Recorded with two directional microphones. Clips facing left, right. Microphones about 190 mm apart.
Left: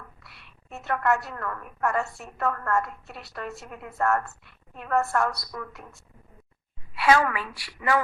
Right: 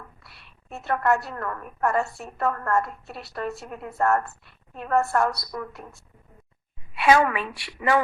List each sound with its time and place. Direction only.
0.2 s a woman's voice: 35° right (ahead or behind)
6.9 s a woman's voice: 20° right (ahead or behind)